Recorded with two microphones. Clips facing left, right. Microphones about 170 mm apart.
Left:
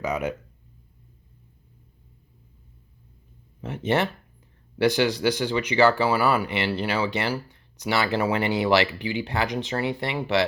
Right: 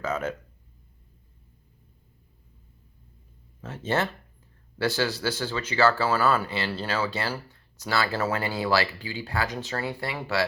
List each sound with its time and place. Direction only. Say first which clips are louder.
0.0 s speech: left 2 dB; 15° left (ahead or behind)
3.6 s speech: left 3 dB; 15° left (ahead or behind)